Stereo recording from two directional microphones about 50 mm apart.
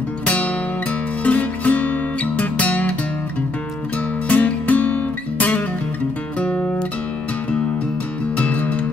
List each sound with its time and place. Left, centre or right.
1.2 s music: left
4.3 s music: left
8.4 s music: left